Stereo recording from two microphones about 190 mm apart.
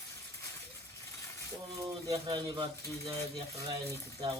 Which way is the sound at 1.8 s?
20° right (ahead or behind).